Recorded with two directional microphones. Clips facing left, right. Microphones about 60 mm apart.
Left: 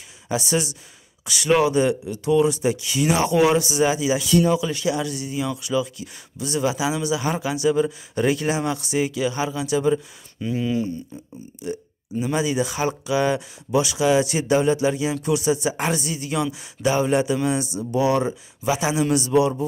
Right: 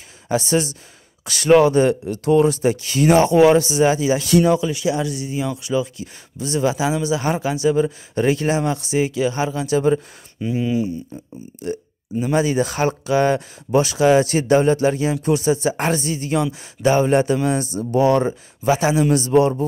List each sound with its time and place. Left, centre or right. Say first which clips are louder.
0.5 s speech: right 4 dB; right
4.3 s speech: right 3 dB; right
4.6 s speech: right 3 dB; right
10.4 s speech: right 3 dB; centre
12.4 s speech: right 5 dB; right